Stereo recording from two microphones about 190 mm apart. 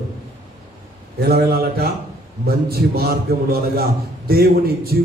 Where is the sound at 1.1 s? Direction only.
55° right (ahead or behind).